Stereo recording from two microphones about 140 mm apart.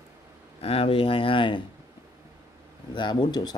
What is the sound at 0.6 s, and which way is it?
Speech, 45° left (ahead or behind).